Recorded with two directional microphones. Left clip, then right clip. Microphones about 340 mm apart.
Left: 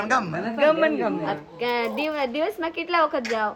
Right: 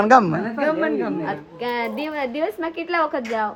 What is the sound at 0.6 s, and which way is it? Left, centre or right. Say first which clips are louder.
Speech: left 3 dB; centre.